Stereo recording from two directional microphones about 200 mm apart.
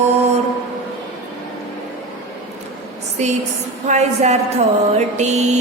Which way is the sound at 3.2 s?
35° right (ahead or behind).